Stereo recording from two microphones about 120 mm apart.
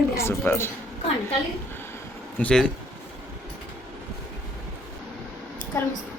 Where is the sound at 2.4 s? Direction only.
5° left (ahead or behind).